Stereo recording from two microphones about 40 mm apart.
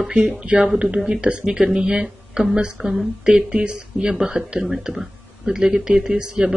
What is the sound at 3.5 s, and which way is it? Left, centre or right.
Speech, right.